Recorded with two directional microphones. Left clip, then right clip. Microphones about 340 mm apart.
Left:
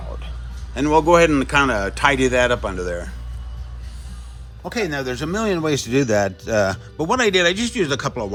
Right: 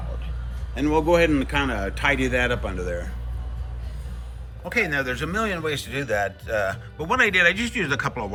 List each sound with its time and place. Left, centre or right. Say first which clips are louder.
0.7 s a man's voice: left 5 dB; centre
4.6 s a man's voice: even; centre